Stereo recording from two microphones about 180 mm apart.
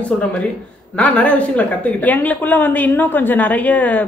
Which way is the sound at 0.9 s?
5° left (ahead or behind).